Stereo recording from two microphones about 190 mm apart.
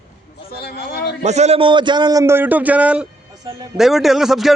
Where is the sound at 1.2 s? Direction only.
35° right (ahead or behind).